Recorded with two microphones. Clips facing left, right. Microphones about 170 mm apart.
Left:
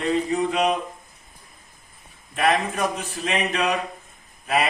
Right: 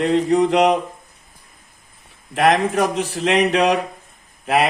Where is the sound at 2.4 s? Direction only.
90° right.